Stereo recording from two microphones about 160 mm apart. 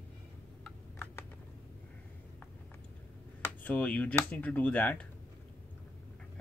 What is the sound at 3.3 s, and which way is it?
Speech, 10° left (ahead or behind).